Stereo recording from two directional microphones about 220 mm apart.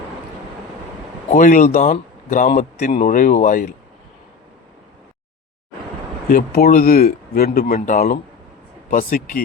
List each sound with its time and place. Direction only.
1.3 s speech: 40° left (ahead or behind)
6.3 s speech: 40° left (ahead or behind)